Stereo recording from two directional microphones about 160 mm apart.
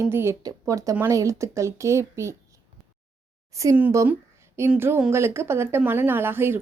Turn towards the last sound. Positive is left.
turn(degrees=-15)  # may be behind; listen again after turning